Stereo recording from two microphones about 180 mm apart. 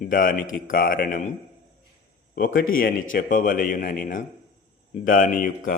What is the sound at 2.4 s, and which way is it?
A man's voice, 50° left (ahead or behind).